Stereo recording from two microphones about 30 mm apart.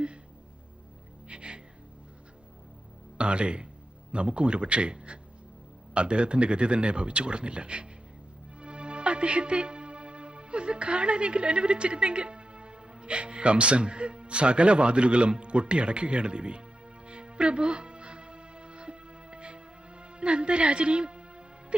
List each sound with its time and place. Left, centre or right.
1.3 s music: right
3.2 s speech: right
8.6 s music: right